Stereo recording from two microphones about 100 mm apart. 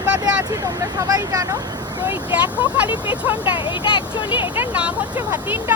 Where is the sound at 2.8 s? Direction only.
60° left (ahead or behind).